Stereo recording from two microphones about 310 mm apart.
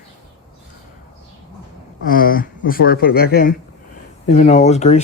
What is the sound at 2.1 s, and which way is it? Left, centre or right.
Speech, left.